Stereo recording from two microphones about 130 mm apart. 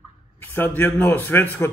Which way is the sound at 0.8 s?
15° left (ahead or behind).